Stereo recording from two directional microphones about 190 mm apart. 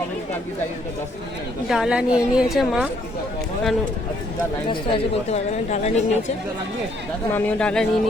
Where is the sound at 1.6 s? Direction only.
5° right (ahead or behind).